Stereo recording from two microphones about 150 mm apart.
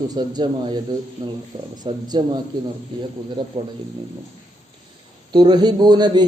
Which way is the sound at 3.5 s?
40° right (ahead or behind).